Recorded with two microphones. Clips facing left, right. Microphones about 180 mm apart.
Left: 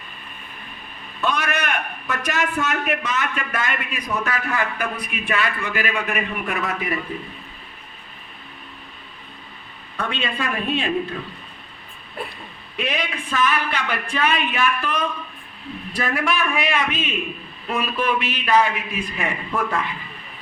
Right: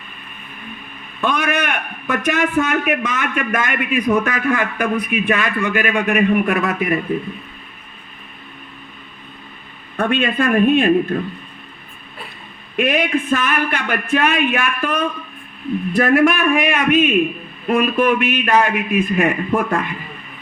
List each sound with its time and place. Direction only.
1.2 s a man's voice: 50° right (ahead or behind)
10.0 s a man's voice: 50° right (ahead or behind)
12.7 s a man's voice: 50° right (ahead or behind)